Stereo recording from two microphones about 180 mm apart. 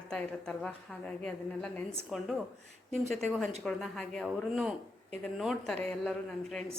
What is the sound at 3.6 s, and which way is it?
A woman's voice, 5° left (ahead or behind).